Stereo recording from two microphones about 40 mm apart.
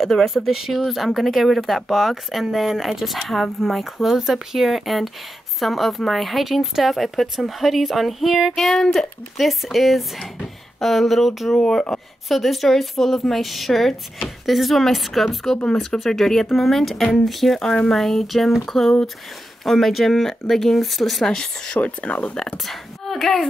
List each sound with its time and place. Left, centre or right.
0.0 s speech: centre
8.5 s speech: centre
8.9 s speech: centre
11.6 s speech: centre
12.3 s speech: centre
15.5 s speech: centre
16.1 s speech: centre
17.6 s speech: centre
21.8 s speech: left
22.7 s speech: centre